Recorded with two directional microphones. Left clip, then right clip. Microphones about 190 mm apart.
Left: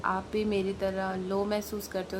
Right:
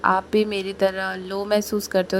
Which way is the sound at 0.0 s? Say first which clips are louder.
Right 11 dB; 40° right (ahead or behind).